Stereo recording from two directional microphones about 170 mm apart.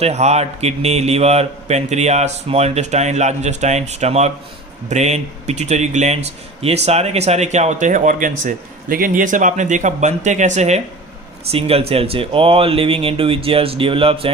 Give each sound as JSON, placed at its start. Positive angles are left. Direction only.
{"t": 0.0, "sound": "speech", "side_deg": -40}